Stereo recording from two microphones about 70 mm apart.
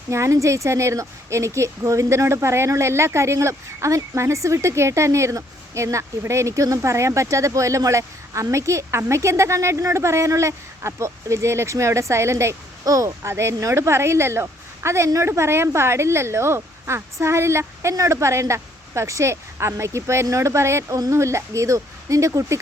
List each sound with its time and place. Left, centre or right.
0.1 s speech: right
12.8 s speech: right
13.2 s speech: right